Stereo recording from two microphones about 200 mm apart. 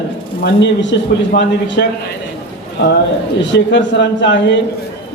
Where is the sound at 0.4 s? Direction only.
60° left (ahead or behind).